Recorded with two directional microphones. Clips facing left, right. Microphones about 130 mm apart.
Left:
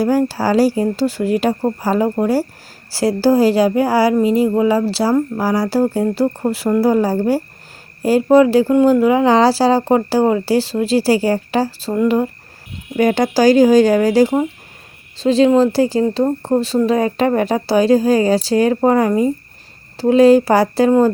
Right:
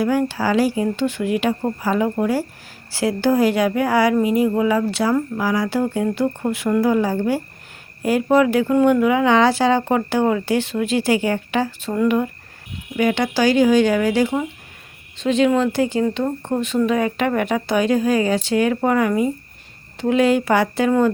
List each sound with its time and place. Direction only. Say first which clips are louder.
0.0 s speech: left 3 dB; 35° left (ahead or behind)
13.0 s speech: left 5 dB; 40° left (ahead or behind)